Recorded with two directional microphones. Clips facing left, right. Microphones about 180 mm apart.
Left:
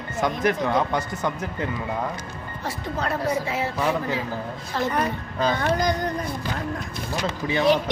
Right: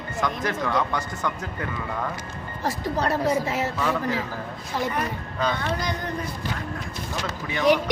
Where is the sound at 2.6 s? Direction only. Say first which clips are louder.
Right 3 dB; 40° right (ahead or behind).